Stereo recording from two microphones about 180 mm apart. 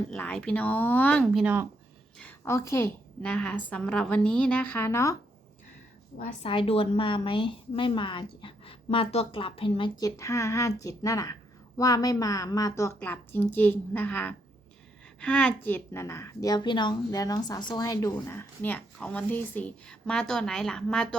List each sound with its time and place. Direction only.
0.1 s a woman's voice: 5° left (ahead or behind)
2.1 s a woman's voice: 10° left (ahead or behind)
6.1 s a woman's voice: 30° left (ahead or behind)
10.0 s a woman's voice: 15° left (ahead or behind)